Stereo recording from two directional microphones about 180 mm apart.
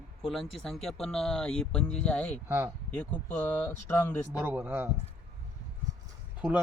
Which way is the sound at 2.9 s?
10° left (ahead or behind).